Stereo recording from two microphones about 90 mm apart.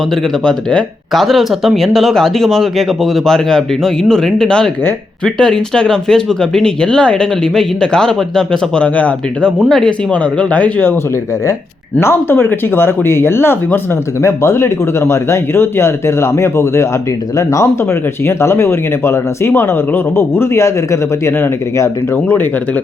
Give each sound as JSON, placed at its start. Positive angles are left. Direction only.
{"t": 0.4, "sound": "speech", "side_deg": 10}
{"t": 9.6, "sound": "speech", "side_deg": 5}
{"t": 10.1, "sound": "speech", "side_deg": 15}
{"t": 11.9, "sound": "speech", "side_deg": 25}